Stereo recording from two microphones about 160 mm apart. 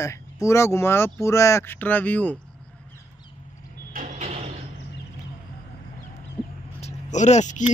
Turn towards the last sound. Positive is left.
turn(degrees=50)  # may be behind; listen again after turning